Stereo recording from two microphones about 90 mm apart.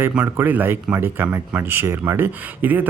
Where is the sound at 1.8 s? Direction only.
35° right (ahead or behind).